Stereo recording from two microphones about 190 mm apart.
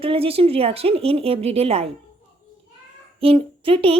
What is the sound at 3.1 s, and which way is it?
Speech, 30° right (ahead or behind).